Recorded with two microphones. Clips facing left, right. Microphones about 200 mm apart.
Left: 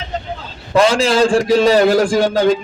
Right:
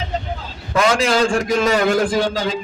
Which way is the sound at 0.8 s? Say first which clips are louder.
Left 4 dB; 30° left (ahead or behind).